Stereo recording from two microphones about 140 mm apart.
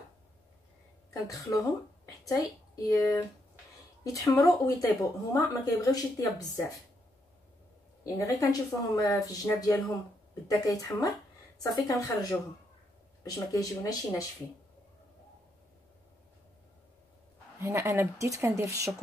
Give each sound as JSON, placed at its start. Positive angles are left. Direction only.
{"t": 1.2, "sound": "speech", "side_deg": 25}
{"t": 8.0, "sound": "speech", "side_deg": 25}
{"t": 17.6, "sound": "speech", "side_deg": -20}